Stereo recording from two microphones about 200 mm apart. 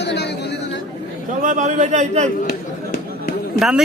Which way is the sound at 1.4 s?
35° right (ahead or behind).